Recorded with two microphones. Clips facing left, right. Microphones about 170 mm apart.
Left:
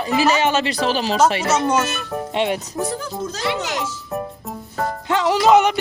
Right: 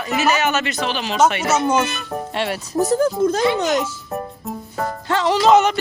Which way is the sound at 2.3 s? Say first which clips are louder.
Left 4 dB; 20° left (ahead or behind).